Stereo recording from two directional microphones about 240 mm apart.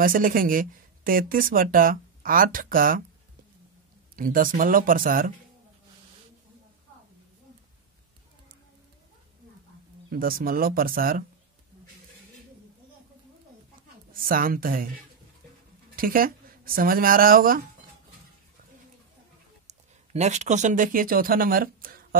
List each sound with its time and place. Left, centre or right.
0.0 s speech: right
4.2 s speech: right
10.0 s speech: right
14.1 s speech: right
16.0 s speech: right
19.7 s speech: right